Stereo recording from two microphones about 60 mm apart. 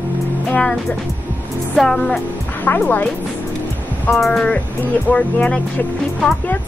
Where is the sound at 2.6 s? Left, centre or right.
Left.